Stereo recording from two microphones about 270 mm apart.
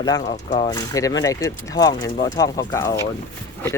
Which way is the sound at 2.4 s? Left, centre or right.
Centre.